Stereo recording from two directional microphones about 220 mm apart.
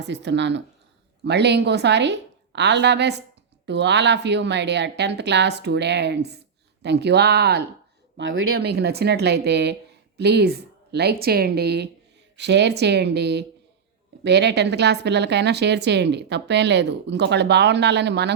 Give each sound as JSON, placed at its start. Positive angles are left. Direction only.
{"t": 0.0, "sound": "a woman's voice", "side_deg": -50}
{"t": 8.1, "sound": "a woman's voice", "side_deg": -60}